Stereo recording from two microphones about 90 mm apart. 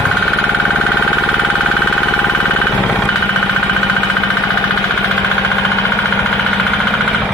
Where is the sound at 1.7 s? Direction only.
10° left (ahead or behind).